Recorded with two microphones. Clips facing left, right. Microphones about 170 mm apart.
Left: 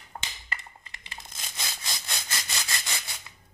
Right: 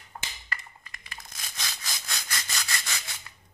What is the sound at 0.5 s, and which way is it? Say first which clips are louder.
Sawing: even; 25° left (ahead or behind).